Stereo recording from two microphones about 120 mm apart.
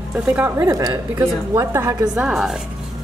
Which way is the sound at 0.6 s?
30° right (ahead or behind).